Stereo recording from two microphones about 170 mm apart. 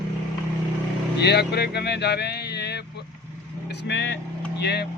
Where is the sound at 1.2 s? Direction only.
75° left (ahead or behind).